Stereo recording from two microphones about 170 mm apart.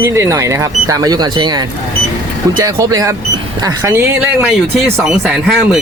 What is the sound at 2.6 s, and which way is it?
Speech, 20° right (ahead or behind).